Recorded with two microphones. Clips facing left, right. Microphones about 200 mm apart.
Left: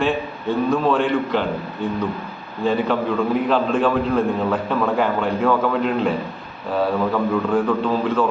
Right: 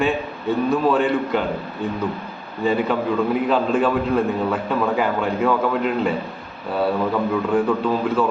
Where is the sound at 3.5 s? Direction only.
5° right (ahead or behind).